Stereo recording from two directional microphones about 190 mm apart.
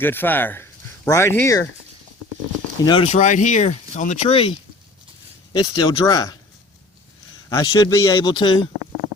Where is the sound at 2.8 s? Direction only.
30° left (ahead or behind).